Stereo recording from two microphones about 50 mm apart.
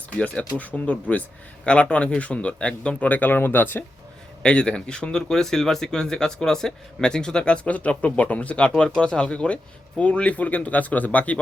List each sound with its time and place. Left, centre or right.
0.2 s speech: left
3.0 s speech: left
4.4 s speech: centre